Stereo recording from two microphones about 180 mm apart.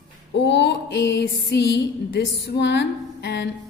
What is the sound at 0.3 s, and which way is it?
Female singing, 75° left (ahead or behind).